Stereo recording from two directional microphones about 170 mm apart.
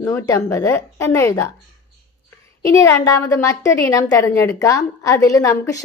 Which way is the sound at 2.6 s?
20° left (ahead or behind).